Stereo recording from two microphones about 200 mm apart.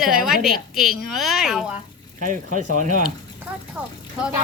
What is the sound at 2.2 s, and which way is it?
Speech, 40° right (ahead or behind).